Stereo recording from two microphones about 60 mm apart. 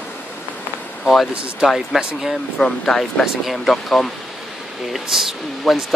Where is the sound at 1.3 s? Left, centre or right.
Centre.